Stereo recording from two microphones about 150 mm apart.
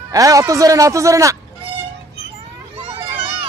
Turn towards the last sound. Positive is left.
turn(degrees=-40)  # may be behind; listen again after turning